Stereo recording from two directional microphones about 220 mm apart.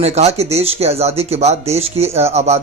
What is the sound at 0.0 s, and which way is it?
Speech, 30° right (ahead or behind).